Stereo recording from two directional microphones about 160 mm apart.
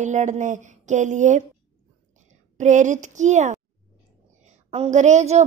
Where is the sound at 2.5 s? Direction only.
50° right (ahead or behind).